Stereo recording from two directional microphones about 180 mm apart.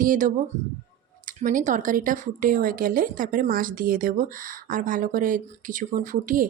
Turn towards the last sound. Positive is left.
turn(degrees=-50)  # may be behind; listen again after turning